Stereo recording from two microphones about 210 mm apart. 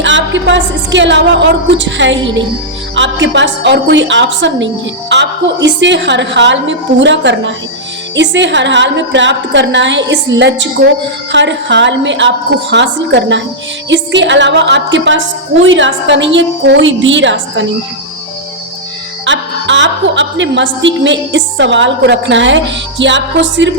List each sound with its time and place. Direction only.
0.0 s a woman's voice: 60° right (ahead or behind)
19.2 s a woman's voice: 60° right (ahead or behind)